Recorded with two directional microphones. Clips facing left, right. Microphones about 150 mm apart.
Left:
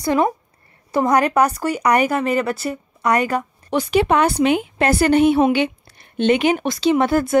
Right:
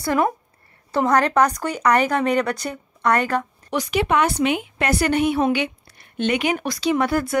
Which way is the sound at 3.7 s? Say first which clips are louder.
Left 4 dB; 30° left (ahead or behind).